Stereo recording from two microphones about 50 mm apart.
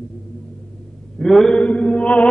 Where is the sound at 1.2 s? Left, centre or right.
Centre.